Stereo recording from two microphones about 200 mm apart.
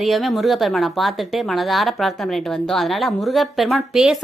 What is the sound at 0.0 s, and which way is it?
A woman's voice, centre (ahead or behind).